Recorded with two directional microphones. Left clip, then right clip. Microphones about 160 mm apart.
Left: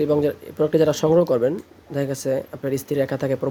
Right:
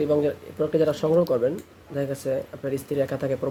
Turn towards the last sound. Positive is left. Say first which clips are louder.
# left 3 dB
turn(degrees=30)  # may be behind; listen again after turning